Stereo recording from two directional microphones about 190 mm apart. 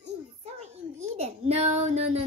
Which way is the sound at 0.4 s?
35° right (ahead or behind).